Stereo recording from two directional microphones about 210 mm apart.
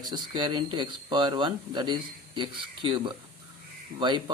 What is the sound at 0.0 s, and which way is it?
Speech, 20° right (ahead or behind).